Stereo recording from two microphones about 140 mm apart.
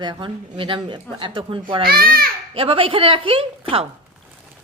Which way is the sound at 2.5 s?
40° right (ahead or behind).